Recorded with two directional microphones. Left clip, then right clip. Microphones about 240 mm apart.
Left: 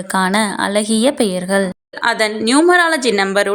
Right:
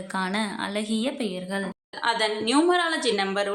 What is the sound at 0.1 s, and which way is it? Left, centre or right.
A woman's voice, left.